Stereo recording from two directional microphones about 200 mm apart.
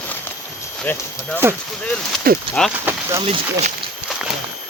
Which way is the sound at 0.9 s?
10° left (ahead or behind).